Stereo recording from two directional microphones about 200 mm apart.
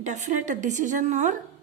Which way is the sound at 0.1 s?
35° right (ahead or behind).